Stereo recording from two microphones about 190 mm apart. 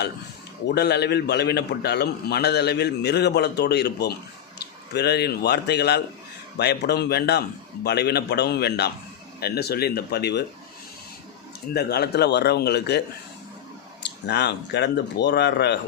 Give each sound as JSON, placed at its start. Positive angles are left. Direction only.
{"t": 0.7, "sound": "a man's voice", "side_deg": 60}
{"t": 11.7, "sound": "a man's voice", "side_deg": 55}
{"t": 14.3, "sound": "a man's voice", "side_deg": 60}